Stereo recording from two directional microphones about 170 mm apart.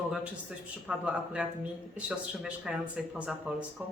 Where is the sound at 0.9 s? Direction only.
5° right (ahead or behind).